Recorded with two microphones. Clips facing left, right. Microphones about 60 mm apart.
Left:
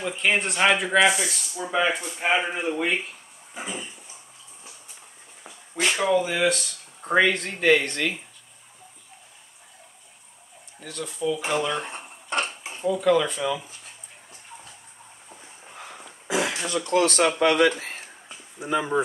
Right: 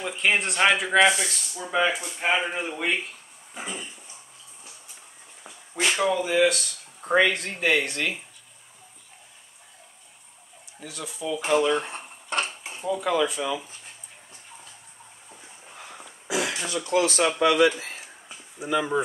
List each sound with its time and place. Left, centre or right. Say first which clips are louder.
0.0 s speech: even; centre
5.9 s speech: left 2 dB; centre
10.8 s speech: left 4 dB; centre
16.3 s throat clearing: left 2 dB; left
16.7 s speech: left 2 dB; left